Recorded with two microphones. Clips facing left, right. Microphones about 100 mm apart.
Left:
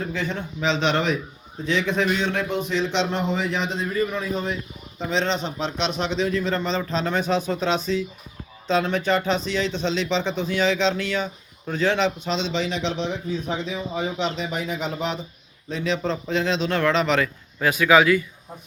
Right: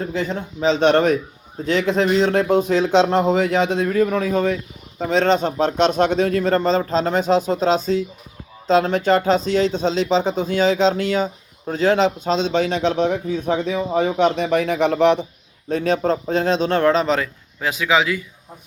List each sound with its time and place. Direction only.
0.0 s speech: 35° right (ahead or behind); by 15.3 s 65° right (ahead or behind)
15.7 s speech: 45° right (ahead or behind)
17.6 s a man's voice: 20° right (ahead or behind)